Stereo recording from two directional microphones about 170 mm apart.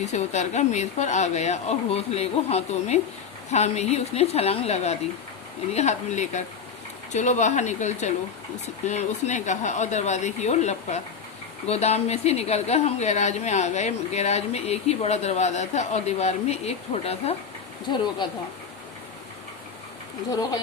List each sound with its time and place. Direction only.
0.0 s a woman's voice: 40° left (ahead or behind)
17.8 s speech: 25° left (ahead or behind)